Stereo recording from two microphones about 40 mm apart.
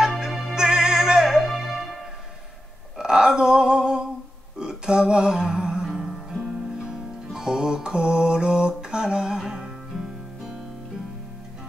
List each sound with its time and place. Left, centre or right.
0.2 s music: centre
1.4 s music: centre
3.0 s a sound: centre
4.6 s music: centre